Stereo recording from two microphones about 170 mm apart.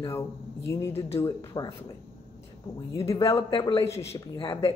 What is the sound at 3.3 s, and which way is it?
Speech, 30° left (ahead or behind).